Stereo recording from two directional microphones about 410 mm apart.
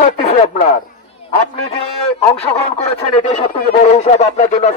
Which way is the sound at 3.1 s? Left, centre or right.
Centre.